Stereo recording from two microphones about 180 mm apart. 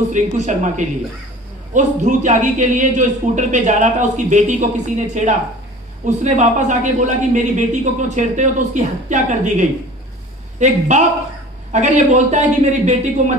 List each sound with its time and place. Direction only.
0.1 s a man's voice: 45° right (ahead or behind)